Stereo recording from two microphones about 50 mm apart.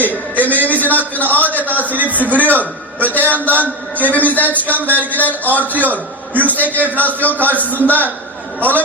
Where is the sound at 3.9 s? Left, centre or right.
Left.